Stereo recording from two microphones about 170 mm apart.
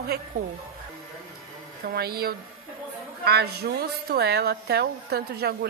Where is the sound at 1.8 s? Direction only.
60° right (ahead or behind).